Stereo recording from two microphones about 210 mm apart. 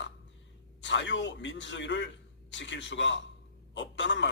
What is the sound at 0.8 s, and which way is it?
Speech, 60° left (ahead or behind).